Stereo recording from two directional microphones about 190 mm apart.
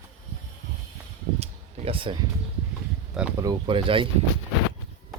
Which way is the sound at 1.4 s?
30° right (ahead or behind).